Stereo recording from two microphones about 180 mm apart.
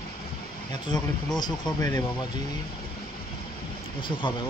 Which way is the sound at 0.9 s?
20° left (ahead or behind).